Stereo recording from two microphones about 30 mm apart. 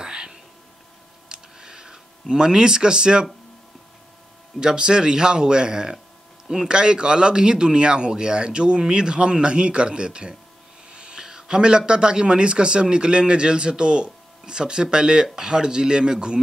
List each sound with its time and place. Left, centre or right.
0.0 s whispering: right
1.3 s a sound: centre
4.6 s speech: right
6.7 s speech: right
10.9 s a sound: right
11.1 s a man's voice: centre